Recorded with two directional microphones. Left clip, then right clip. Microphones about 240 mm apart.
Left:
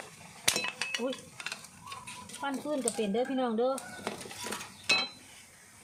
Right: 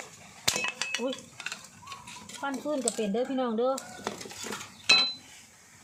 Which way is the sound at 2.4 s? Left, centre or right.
Centre.